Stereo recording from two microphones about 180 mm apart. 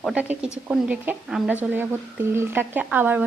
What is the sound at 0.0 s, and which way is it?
A woman's voice, 5° right (ahead or behind).